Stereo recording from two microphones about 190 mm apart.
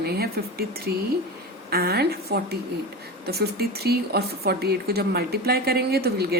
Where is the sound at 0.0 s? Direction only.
55° right (ahead or behind).